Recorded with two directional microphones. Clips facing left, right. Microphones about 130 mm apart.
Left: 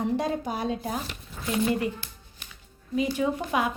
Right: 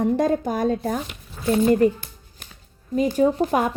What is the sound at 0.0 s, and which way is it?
Speech, 45° right (ahead or behind).